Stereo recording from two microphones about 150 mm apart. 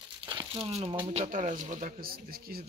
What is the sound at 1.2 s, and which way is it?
Speech, 60° right (ahead or behind).